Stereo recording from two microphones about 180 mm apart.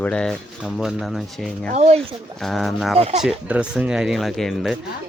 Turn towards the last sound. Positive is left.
turn(degrees=0)  # may be behind; listen again after turning